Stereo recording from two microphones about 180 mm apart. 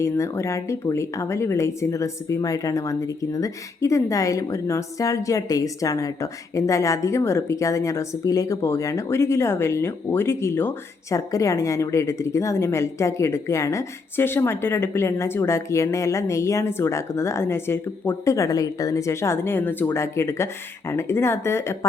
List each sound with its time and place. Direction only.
0.0 s speech: 15° left (ahead or behind)